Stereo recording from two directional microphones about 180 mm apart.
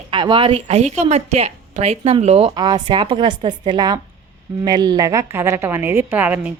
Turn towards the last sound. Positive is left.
turn(degrees=-10)  # may be behind; listen again after turning